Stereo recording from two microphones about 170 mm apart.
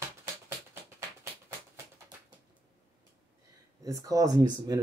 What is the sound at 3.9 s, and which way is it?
Speech, 20° right (ahead or behind).